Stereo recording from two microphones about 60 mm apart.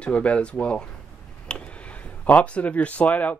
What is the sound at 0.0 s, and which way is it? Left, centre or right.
Speech, centre.